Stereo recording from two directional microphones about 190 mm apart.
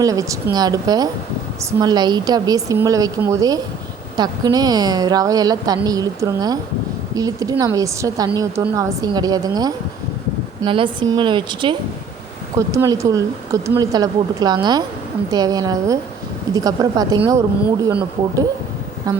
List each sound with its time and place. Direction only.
0.0 s a woman's voice: 20° right (ahead or behind)